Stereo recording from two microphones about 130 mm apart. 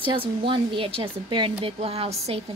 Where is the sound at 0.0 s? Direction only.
40° right (ahead or behind).